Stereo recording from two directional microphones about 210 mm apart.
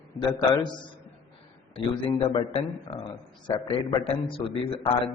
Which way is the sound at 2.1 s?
25° left (ahead or behind).